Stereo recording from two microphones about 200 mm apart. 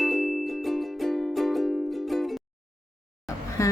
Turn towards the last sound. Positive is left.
turn(degrees=15)  # may be behind; listen again after turning